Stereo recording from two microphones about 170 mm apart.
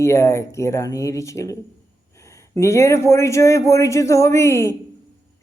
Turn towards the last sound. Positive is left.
turn(degrees=15)  # may be behind; listen again after turning